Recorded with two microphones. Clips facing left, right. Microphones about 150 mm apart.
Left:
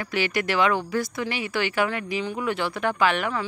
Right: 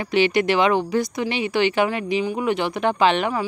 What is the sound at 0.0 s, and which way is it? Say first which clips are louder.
Speech: right 7 dB; 20° right (ahead or behind).